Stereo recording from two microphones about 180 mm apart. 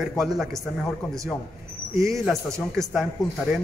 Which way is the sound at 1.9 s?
15° right (ahead or behind).